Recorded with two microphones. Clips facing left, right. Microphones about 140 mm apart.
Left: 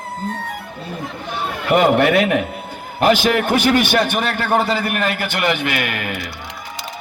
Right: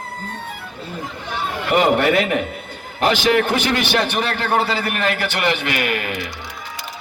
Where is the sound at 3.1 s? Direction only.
50° left (ahead or behind).